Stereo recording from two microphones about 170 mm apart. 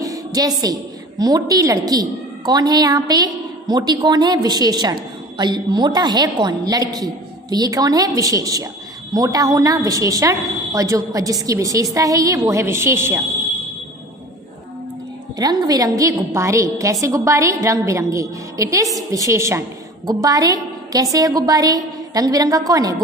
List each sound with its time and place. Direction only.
0.0 s a woman's voice: 20° right (ahead or behind)
15.3 s a woman's voice: 20° right (ahead or behind)